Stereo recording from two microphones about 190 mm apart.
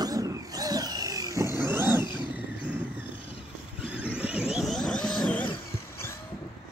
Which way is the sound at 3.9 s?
5° right (ahead or behind).